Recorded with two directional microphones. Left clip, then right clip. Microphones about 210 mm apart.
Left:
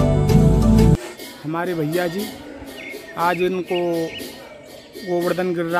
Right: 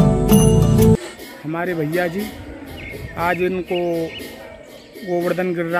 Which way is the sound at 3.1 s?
Centre (ahead or behind).